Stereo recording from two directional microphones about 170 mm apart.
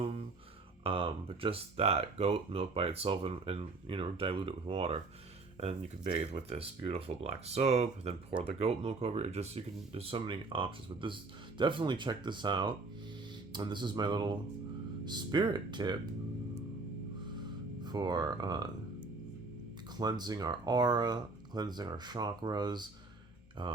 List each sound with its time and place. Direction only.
0.9 s speech: 30° right (ahead or behind)
6.1 s speech: 35° right (ahead or behind)
17.8 s speech: 25° right (ahead or behind)
20.0 s speech: 25° right (ahead or behind)